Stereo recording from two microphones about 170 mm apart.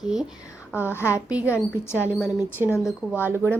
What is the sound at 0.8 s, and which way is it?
Speech, 15° left (ahead or behind).